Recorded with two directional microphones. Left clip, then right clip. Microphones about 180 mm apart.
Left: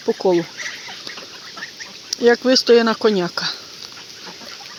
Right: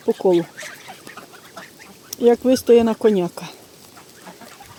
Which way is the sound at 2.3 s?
15° right (ahead or behind).